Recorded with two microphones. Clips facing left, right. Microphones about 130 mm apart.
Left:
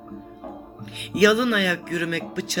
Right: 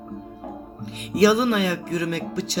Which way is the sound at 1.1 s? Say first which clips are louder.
Right 1 dB; 35° right (ahead or behind).